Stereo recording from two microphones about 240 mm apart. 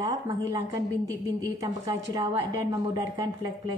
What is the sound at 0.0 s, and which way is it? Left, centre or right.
A woman's voice, centre.